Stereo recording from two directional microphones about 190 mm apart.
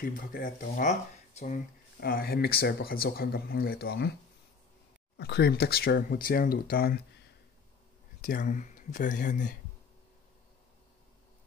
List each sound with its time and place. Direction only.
0.0 s speech: 50° left (ahead or behind)
5.1 s speech: 60° left (ahead or behind)
8.2 s speech: 45° left (ahead or behind)